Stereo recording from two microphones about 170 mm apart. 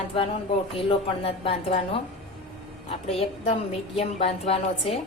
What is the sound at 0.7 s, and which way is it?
A woman's voice, 35° left (ahead or behind).